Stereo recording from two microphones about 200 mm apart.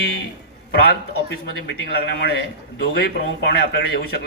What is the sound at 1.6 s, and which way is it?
Speech, 60° left (ahead or behind).